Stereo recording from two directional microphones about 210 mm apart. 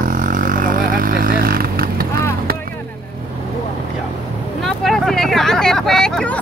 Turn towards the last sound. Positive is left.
turn(degrees=5)  # may be behind; listen again after turning